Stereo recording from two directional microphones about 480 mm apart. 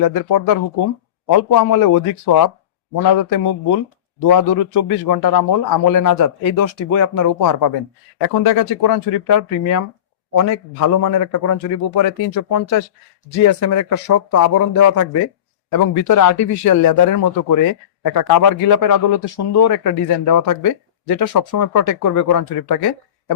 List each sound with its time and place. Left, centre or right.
0.1 s a man's voice: left
8.4 s a man's voice: left